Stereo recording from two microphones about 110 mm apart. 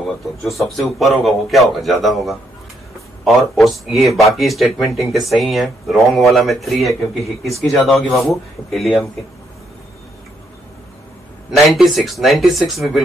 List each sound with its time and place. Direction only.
0.0 s speech: centre (ahead or behind)
11.5 s speech: centre (ahead or behind)